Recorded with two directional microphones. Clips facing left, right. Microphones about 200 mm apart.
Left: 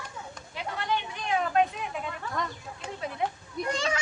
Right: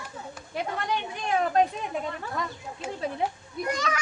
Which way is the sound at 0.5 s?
45° right (ahead or behind).